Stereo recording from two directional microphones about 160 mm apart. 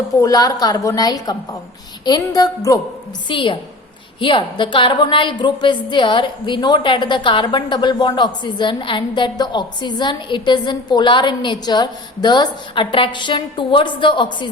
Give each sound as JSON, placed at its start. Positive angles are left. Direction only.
{"t": 0.2, "sound": "a woman's voice", "side_deg": 20}
{"t": 3.2, "sound": "a woman's voice", "side_deg": 30}